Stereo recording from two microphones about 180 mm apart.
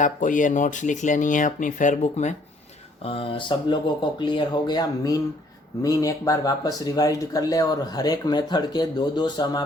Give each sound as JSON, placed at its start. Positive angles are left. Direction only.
{"t": 0.0, "sound": "speech", "side_deg": 45}